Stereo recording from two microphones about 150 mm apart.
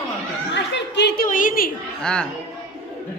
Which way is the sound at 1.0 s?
80° left.